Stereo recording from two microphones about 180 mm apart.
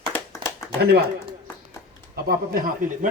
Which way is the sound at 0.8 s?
65° right (ahead or behind).